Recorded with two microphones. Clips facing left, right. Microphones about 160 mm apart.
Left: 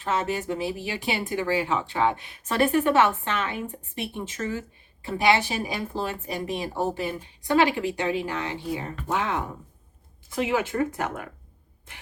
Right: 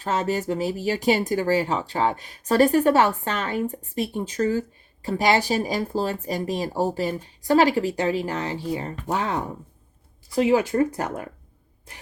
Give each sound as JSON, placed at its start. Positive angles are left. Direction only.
{"t": 0.0, "sound": "speech", "side_deg": -40}